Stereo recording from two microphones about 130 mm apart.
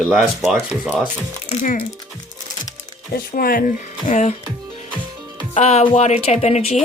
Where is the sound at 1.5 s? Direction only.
85° left.